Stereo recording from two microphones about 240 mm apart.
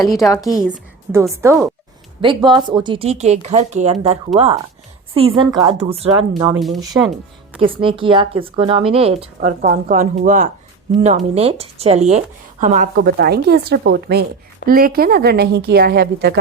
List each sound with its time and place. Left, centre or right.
0.4 s a woman's voice: centre
6.5 s a woman's voice: centre
7.6 s speech: right